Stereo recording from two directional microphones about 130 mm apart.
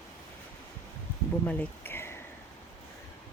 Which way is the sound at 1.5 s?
15° left (ahead or behind).